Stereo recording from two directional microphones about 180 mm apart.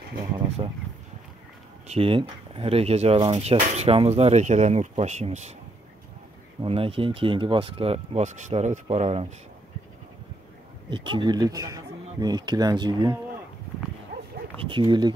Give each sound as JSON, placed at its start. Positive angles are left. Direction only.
{"t": 0.6, "sound": "speech", "side_deg": -30}
{"t": 1.9, "sound": "speech", "side_deg": -30}
{"t": 6.6, "sound": "speech", "side_deg": -30}
{"t": 10.9, "sound": "speech", "side_deg": -25}
{"t": 14.6, "sound": "speech", "side_deg": -30}